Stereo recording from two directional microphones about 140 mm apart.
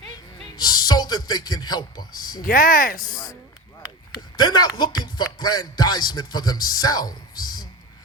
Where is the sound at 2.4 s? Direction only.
90° left.